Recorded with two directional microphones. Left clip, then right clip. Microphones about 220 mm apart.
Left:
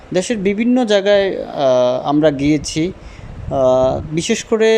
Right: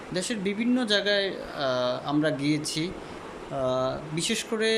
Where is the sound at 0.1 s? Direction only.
30° left (ahead or behind).